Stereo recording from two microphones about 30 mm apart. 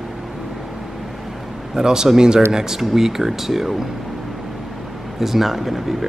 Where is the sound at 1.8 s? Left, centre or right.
Right.